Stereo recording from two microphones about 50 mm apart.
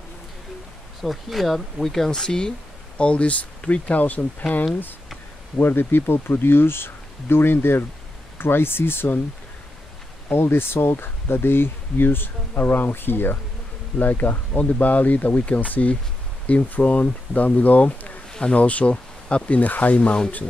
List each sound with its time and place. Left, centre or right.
1.0 s speech: centre
3.0 s speech: left
5.6 s speech: left
10.3 s speech: left
20.0 s speech: left